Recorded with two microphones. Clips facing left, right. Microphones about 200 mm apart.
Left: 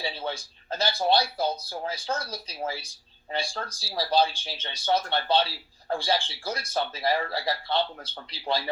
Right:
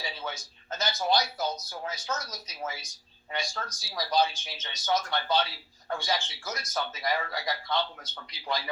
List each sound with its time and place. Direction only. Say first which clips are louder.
0.0 s speech: left 5 dB; 30° left (ahead or behind)